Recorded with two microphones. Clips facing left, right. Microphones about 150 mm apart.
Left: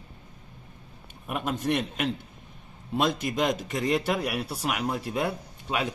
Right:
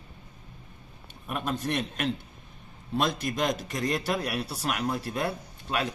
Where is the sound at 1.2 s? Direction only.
10° left (ahead or behind).